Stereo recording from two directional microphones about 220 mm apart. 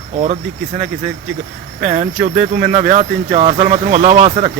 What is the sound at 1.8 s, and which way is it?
Speech, 35° right (ahead or behind).